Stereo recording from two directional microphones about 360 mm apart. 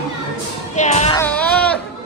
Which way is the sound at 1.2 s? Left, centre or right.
Centre.